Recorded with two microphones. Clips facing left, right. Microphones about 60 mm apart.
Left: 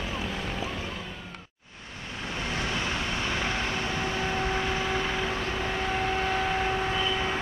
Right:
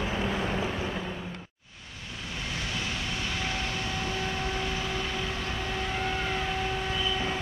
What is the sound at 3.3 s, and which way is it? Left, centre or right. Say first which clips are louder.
Vehicle: left 3 dB; left.